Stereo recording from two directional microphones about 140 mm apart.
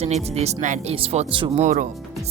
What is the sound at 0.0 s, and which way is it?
Speech, 50° right (ahead or behind).